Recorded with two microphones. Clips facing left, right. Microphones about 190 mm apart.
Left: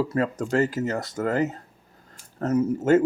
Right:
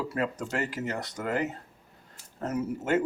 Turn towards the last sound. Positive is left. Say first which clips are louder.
# left 8 dB
turn(degrees=45)  # may be behind; listen again after turning